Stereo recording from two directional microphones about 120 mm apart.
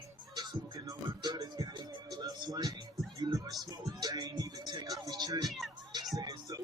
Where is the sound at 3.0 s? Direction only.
Centre (ahead or behind).